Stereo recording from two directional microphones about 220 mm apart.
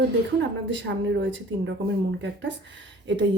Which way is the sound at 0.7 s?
55° right (ahead or behind).